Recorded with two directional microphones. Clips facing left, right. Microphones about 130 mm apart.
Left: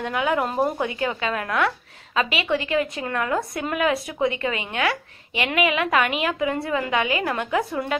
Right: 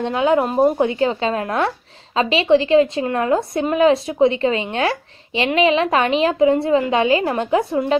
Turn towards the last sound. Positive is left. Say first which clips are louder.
# right 6 dB
turn(degrees=-25)  # may be behind; listen again after turning